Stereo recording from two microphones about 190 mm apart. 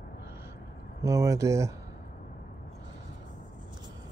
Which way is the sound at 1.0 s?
15° right (ahead or behind).